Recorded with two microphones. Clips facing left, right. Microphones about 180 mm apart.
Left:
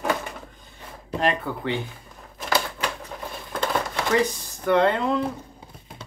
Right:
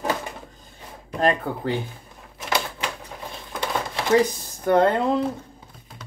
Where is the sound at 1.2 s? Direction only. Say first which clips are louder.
Right 3 dB; 40° right (ahead or behind).